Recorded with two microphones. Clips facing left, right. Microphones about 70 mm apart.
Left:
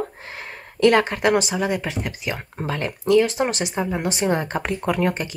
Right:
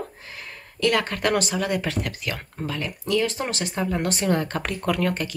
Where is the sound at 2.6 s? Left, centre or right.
Left.